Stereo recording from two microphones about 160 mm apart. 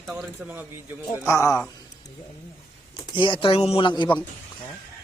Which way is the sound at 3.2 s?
30° left (ahead or behind).